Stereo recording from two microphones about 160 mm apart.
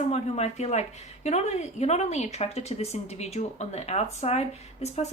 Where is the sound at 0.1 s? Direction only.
45° left (ahead or behind).